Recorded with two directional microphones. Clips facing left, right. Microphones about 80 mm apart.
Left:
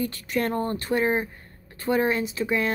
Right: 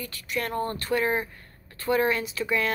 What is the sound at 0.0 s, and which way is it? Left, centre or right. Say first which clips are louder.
Speech: left 5 dB; left.